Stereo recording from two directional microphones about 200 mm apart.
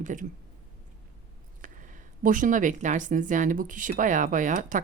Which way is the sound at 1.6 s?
40° right (ahead or behind).